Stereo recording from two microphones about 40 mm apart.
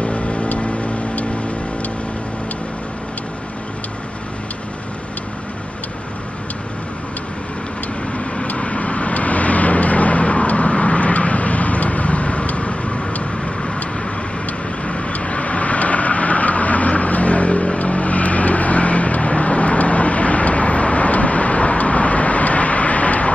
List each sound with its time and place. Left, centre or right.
0.0 s vehicle: left
8.5 s vehicle: left
15.1 s vehicle: left